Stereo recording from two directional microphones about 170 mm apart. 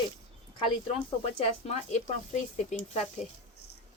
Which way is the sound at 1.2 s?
35° left (ahead or behind).